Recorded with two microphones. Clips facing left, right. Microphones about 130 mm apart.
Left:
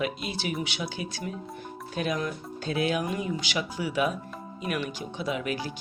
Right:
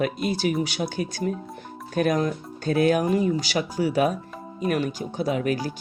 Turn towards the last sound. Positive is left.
turn(degrees=-40)  # may be behind; listen again after turning